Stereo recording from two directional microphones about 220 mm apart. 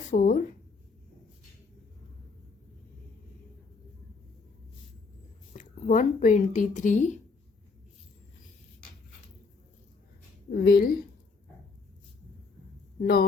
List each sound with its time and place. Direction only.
0.1 s a woman's voice: 35° left (ahead or behind)
5.5 s speech: 35° left (ahead or behind)
10.5 s a woman's voice: 45° left (ahead or behind)
13.0 s a woman's voice: 45° left (ahead or behind)